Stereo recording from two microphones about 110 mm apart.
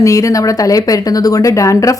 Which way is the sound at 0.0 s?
30° left (ahead or behind).